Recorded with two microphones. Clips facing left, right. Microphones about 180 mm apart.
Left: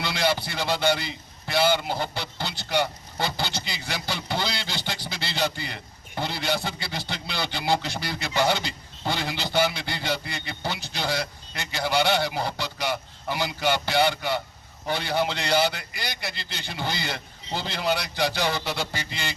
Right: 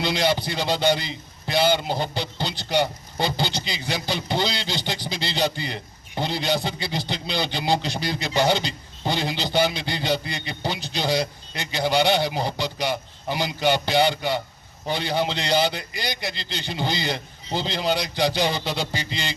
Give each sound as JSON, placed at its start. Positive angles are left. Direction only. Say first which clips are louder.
{"t": 0.0, "sound": "a man's voice", "louder": "right 3 dB", "side_deg": -15}